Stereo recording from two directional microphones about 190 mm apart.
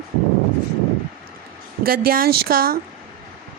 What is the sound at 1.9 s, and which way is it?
Speech, 50° right (ahead or behind).